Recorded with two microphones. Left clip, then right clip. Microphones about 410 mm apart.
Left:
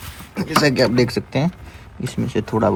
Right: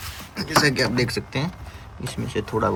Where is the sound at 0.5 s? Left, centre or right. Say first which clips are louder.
Left 4 dB; centre.